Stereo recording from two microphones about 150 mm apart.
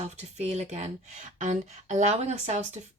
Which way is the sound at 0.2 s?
50° right (ahead or behind).